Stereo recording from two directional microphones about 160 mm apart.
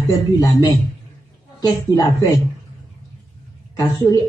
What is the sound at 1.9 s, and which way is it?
Speech, 20° left (ahead or behind).